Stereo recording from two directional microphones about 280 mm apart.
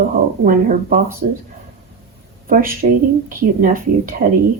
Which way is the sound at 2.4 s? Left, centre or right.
Right.